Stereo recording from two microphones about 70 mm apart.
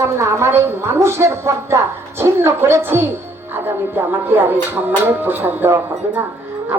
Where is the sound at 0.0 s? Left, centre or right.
Right.